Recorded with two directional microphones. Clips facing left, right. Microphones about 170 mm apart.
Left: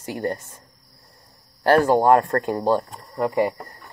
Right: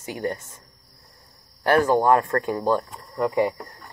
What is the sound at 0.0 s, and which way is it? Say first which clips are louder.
Speech: left 2 dB; 55° left (ahead or behind).